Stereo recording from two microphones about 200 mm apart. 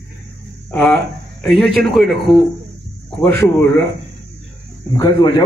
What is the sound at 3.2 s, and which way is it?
Speech, 10° left (ahead or behind).